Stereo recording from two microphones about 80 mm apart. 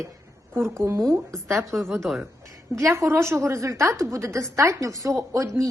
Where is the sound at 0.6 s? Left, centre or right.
Right.